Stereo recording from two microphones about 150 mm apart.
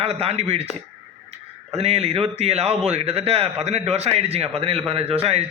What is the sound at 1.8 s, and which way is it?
A man's voice, 45° right (ahead or behind).